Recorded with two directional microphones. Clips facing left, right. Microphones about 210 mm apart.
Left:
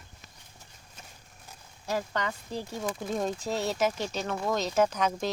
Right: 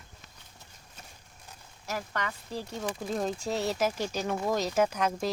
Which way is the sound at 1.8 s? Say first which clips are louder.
Left 4 dB; 25° left (ahead or behind).